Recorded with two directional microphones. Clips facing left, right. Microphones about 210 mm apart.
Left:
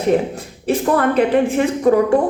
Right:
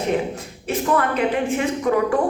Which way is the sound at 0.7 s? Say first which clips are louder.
Left 6 dB; 35° left (ahead or behind).